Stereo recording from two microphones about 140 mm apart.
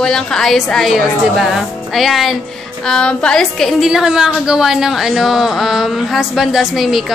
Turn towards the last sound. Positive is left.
turn(degrees=0)  # may be behind; listen again after turning